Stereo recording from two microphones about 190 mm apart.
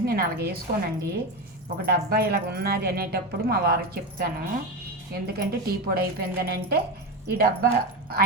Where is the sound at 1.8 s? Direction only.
55° right (ahead or behind).